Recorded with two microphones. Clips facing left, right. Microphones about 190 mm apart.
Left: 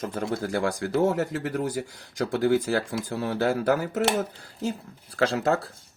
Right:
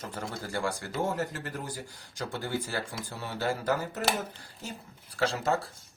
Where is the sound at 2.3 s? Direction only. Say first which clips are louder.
Left 11 dB; 85° left.